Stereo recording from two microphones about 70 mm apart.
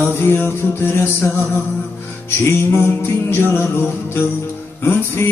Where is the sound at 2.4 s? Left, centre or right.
Left.